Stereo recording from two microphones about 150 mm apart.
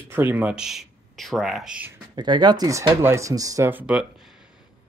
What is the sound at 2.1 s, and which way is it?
Speech, 30° right (ahead or behind).